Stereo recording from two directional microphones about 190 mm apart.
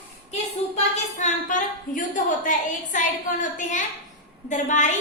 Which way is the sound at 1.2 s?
40° left (ahead or behind).